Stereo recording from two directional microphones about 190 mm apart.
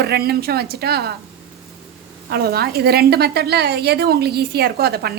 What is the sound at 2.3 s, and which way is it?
A woman's voice, 55° right (ahead or behind).